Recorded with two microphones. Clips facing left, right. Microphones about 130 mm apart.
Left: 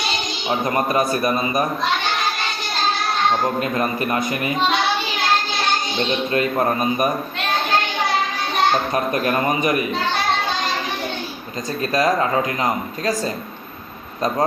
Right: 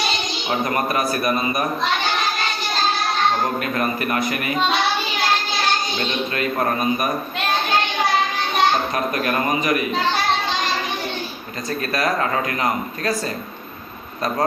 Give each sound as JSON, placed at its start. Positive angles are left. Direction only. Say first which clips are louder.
{"t": 0.6, "sound": "speech", "louder": "left 3 dB", "side_deg": 25}
{"t": 3.6, "sound": "speech", "louder": "left 1 dB", "side_deg": 25}
{"t": 6.3, "sound": "speech", "louder": "left 3 dB", "side_deg": 30}
{"t": 9.2, "sound": "speech", "louder": "left 2 dB", "side_deg": 30}
{"t": 11.8, "sound": "speech", "louder": "left 4 dB", "side_deg": 20}